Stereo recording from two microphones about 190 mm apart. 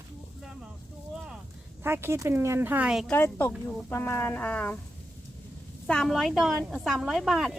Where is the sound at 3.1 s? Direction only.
10° left (ahead or behind).